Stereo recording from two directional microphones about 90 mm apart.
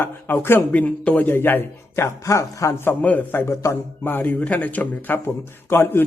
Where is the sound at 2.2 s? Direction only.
35° left (ahead or behind).